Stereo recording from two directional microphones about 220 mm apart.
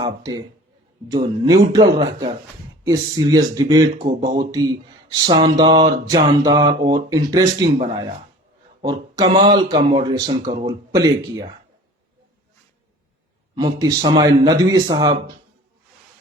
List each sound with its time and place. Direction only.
0.0 s speech: 15° right (ahead or behind)
13.6 s speech: 15° right (ahead or behind)